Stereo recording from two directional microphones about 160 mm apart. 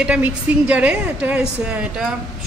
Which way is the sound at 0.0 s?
5° right (ahead or behind).